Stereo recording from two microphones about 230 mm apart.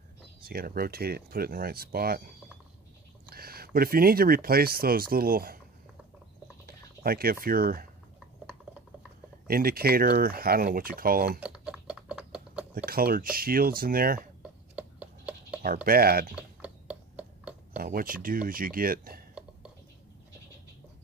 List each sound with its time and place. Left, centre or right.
0.4 s speech: right
3.3 s speech: right
6.6 s a sound: right
7.4 s speech: right
9.5 s speech: right
11.3 s typing: centre
12.7 s speech: right
14.4 s a sound: centre
15.6 s speech: right
16.3 s a sound: centre
17.7 s speech: right